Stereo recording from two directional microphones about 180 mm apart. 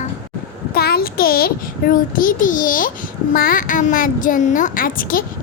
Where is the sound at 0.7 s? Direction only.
60° left (ahead or behind).